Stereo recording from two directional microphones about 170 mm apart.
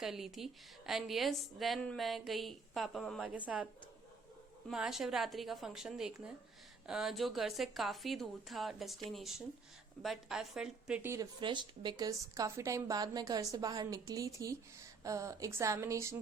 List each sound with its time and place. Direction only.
0.0 s a woman's voice: centre (ahead or behind)
4.7 s a woman's voice: 5° right (ahead or behind)